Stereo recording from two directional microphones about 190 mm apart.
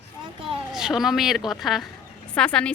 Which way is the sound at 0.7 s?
Centre (ahead or behind).